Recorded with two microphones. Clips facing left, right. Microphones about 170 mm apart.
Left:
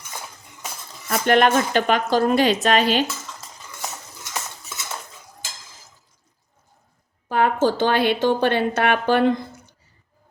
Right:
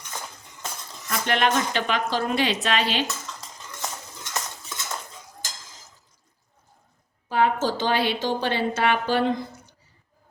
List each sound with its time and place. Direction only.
1.1 s speech: 50° left (ahead or behind)
3.8 s cutlery: 10° left (ahead or behind)
7.3 s a woman's voice: 50° left (ahead or behind)